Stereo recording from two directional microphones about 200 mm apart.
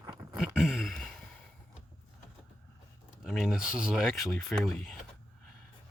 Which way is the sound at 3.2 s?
Centre (ahead or behind).